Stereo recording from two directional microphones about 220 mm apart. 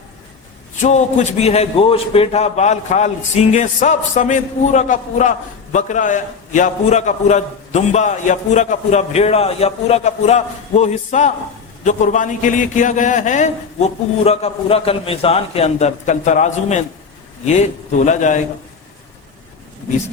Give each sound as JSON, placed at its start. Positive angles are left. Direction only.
{"t": 0.8, "sound": "a man's voice", "side_deg": 30}